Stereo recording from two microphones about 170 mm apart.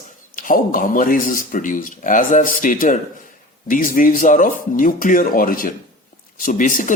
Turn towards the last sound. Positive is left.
turn(degrees=50)  # may be behind; listen again after turning